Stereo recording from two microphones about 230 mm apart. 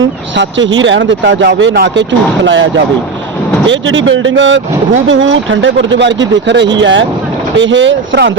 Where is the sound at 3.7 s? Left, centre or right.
Right.